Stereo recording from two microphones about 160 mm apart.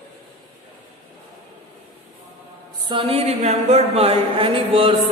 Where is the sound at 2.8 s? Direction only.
35° right (ahead or behind).